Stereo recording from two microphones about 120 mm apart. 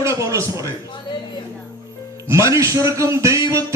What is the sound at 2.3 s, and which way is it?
A man's voice, 25° right (ahead or behind).